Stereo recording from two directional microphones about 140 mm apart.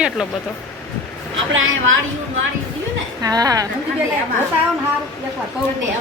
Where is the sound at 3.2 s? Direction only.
25° right (ahead or behind).